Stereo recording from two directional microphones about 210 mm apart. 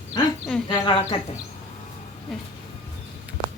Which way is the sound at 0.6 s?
25° left (ahead or behind).